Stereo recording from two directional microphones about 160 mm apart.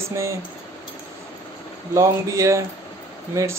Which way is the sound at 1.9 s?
20° right (ahead or behind).